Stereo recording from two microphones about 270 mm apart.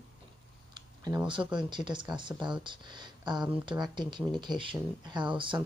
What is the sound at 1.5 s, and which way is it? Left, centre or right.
Speech, centre.